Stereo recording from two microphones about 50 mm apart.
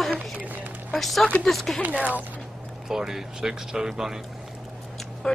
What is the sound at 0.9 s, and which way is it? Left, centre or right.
Speech, centre.